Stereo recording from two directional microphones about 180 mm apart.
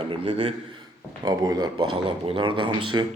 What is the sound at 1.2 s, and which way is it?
Speech, 20° right (ahead or behind).